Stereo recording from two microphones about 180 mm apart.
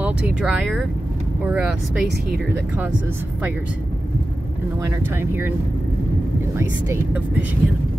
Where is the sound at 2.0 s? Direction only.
65° right (ahead or behind).